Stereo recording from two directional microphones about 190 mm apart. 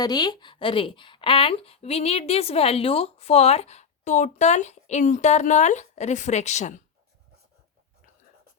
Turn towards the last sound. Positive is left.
turn(degrees=35)  # may be behind; listen again after turning